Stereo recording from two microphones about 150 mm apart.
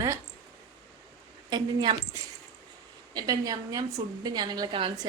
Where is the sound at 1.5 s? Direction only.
30° right (ahead or behind).